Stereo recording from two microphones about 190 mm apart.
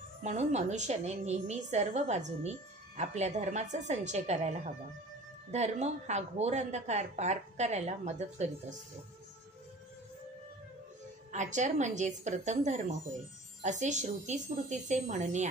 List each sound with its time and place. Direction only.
0.2 s a woman's voice: 35° right (ahead or behind)
11.3 s a woman's voice: 40° right (ahead or behind)